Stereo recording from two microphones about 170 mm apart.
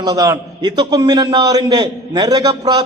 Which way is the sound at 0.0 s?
20° right (ahead or behind).